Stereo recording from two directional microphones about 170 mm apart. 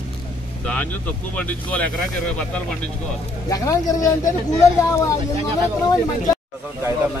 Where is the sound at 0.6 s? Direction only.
10° left (ahead or behind).